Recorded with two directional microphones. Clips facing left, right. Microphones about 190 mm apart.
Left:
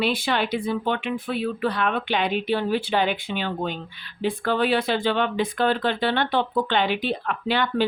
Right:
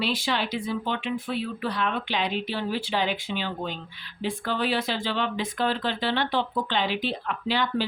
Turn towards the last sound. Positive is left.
turn(degrees=55)  # may be behind; listen again after turning